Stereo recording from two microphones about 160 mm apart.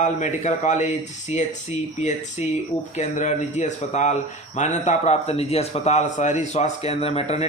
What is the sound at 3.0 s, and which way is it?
Speech, 50° left (ahead or behind).